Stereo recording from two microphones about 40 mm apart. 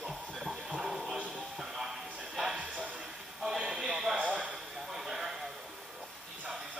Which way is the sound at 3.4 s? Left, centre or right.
Centre.